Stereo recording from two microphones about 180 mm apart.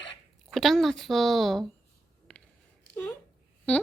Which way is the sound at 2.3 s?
5° left (ahead or behind).